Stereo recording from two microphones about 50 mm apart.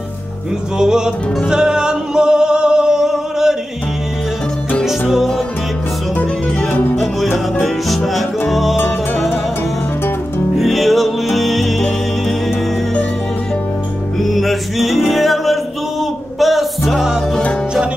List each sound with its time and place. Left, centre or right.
0.7 s music: centre
4.8 s music: centre
8.1 s music: centre
10.6 s music: centre
14.2 s music: centre